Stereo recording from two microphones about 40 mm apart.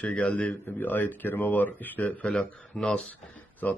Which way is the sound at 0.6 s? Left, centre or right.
Left.